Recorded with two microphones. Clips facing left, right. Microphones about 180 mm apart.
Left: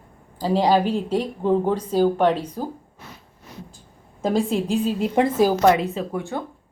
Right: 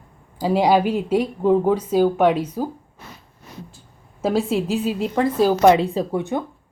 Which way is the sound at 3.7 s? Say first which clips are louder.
Left 1 dB; 5° right (ahead or behind).